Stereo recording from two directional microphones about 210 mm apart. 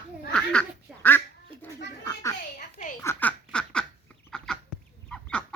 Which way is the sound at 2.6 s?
35° left (ahead or behind).